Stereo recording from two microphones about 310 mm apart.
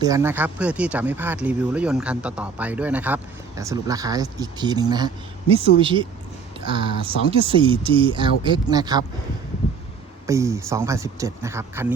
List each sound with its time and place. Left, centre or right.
0.0 s speech: centre
9.6 s a sound: centre
10.2 s speech: centre